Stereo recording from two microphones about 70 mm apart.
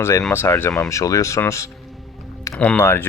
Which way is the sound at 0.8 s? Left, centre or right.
Left.